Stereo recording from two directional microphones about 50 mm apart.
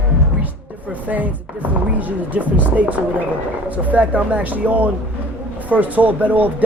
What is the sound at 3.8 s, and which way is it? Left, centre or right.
Speech, right.